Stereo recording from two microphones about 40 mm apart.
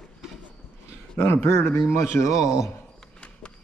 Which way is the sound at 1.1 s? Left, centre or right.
Left.